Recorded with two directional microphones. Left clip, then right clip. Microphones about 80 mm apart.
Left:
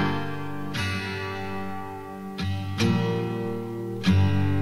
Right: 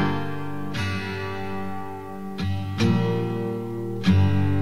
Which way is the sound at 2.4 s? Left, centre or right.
Left.